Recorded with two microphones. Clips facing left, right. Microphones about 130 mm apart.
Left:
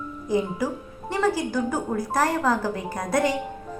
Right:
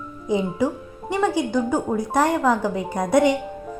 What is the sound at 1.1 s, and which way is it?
A woman's voice, 20° right (ahead or behind).